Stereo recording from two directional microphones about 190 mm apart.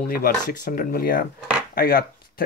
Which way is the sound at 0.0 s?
50° left (ahead or behind).